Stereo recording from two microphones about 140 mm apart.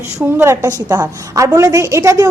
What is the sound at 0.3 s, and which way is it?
A woman's voice, 15° right (ahead or behind).